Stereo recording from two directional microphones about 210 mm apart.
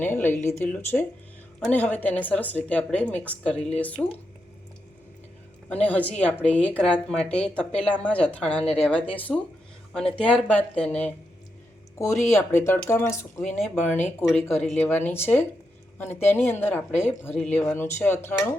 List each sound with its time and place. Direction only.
0.0 s a woman's voice: 10° left (ahead or behind)
5.6 s a woman's voice: 5° left (ahead or behind)